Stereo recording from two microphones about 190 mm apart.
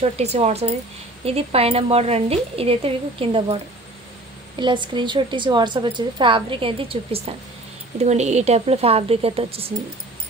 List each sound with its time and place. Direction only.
0.0 s speech: 35° right (ahead or behind)
4.6 s a woman's voice: 25° right (ahead or behind)